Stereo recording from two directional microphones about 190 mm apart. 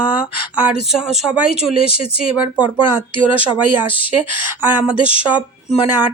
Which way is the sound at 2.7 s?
10° right (ahead or behind).